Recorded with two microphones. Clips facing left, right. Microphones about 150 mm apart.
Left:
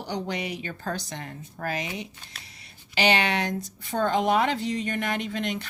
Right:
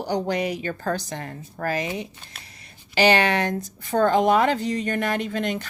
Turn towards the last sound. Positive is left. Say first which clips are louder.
# right 4 dB
turn(degrees=-45)  # may be behind; listen again after turning